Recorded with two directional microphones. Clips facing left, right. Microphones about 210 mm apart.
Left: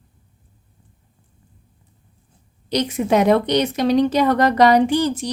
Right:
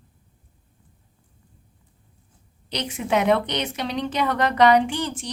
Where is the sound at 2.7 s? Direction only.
40° left (ahead or behind).